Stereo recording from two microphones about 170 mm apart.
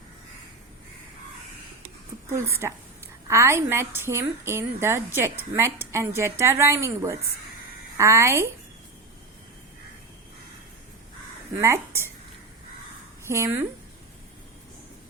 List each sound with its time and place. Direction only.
2.3 s a woman's voice: 15° right (ahead or behind)
11.5 s a woman's voice: 15° right (ahead or behind)
13.2 s a woman's voice: 15° right (ahead or behind)